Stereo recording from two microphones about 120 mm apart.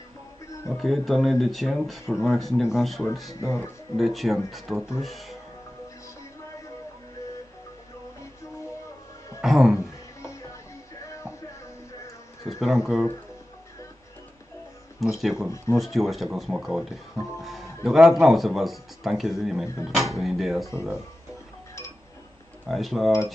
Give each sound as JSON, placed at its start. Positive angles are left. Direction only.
{"t": 0.7, "sound": "speech", "side_deg": 0}
{"t": 3.3, "sound": "speech", "side_deg": 25}
{"t": 3.9, "sound": "speech", "side_deg": 0}
{"t": 9.4, "sound": "speech", "side_deg": -5}
{"t": 12.4, "sound": "speech", "side_deg": -5}
{"t": 15.0, "sound": "speech", "side_deg": 0}
{"t": 15.5, "sound": "speech", "side_deg": 25}
{"t": 15.8, "sound": "speech", "side_deg": 0}
{"t": 22.7, "sound": "speech", "side_deg": 0}